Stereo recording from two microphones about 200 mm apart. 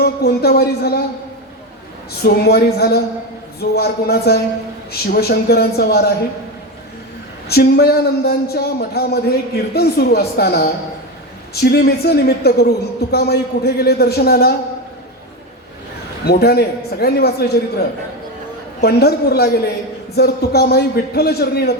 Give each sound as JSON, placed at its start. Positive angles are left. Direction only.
{"t": 0.0, "sound": "speech", "side_deg": 50}
{"t": 2.2, "sound": "speech", "side_deg": 50}
{"t": 7.4, "sound": "speech", "side_deg": 50}
{"t": 16.2, "sound": "speech", "side_deg": 50}
{"t": 18.8, "sound": "speech", "side_deg": 55}